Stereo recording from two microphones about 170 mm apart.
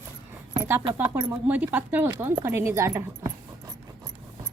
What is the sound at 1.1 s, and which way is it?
Speech, 10° right (ahead or behind).